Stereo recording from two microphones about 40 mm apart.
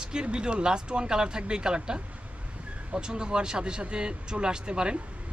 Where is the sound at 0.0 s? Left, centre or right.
Right.